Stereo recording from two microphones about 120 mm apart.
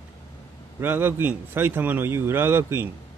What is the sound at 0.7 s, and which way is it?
A man's voice, 15° right (ahead or behind).